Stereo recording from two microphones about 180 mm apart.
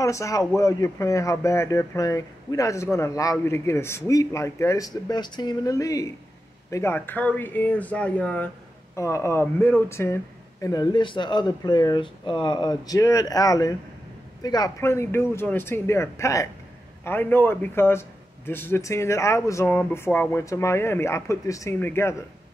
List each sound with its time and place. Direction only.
0.0 s speech: 15° left (ahead or behind)